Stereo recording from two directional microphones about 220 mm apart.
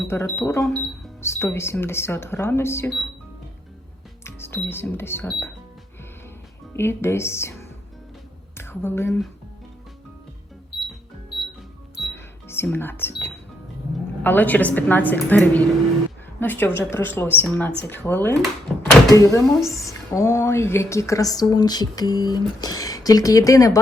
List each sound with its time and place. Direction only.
0.1 s a woman's voice: 10° left (ahead or behind)
4.2 s cash register: 10° left (ahead or behind)
4.7 s a woman's voice: 10° left (ahead or behind)
6.7 s a woman's voice: 10° left (ahead or behind)
8.5 s speech: 10° left (ahead or behind)
12.0 s cash register: 10° left (ahead or behind)
14.3 s a woman's voice: 10° left (ahead or behind)
19.5 s a woman's voice: centre (ahead or behind)
19.8 s a woman's voice: 15° left (ahead or behind)